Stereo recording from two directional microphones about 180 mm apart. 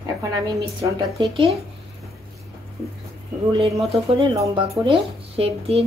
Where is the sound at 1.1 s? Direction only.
30° right (ahead or behind).